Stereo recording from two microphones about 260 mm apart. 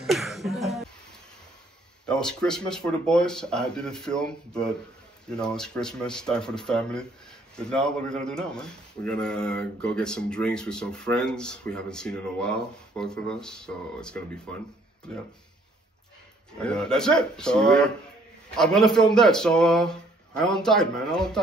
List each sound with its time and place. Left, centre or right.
0.0 s a sound: centre
2.0 s speech: centre
16.6 s speech: centre